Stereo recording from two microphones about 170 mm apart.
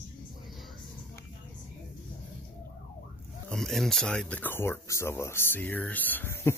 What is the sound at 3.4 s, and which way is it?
Speech, centre (ahead or behind).